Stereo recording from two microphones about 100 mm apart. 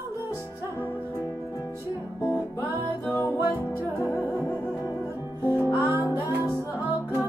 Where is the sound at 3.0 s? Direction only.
20° left (ahead or behind).